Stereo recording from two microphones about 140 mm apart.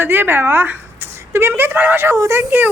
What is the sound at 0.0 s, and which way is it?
Speech, 15° right (ahead or behind).